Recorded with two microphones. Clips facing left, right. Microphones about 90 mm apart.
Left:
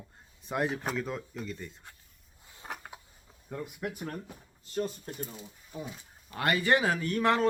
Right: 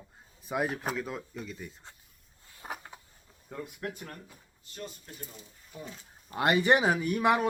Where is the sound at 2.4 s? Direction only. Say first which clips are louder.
Left 1 dB; 20° left (ahead or behind).